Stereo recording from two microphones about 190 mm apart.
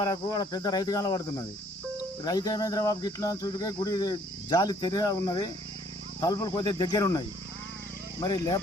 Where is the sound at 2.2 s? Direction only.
20° left (ahead or behind).